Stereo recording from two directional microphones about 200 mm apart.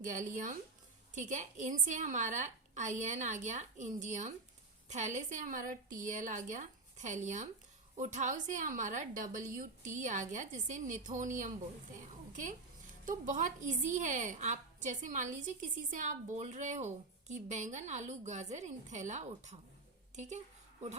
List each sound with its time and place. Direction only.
0.0 s a woman's voice: 40° right (ahead or behind)
13.1 s a woman's voice: 40° right (ahead or behind)